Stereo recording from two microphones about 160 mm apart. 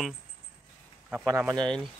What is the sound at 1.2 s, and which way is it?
Speech, 20° right (ahead or behind).